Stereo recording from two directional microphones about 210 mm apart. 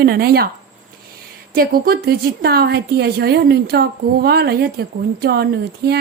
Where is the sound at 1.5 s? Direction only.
45° right (ahead or behind).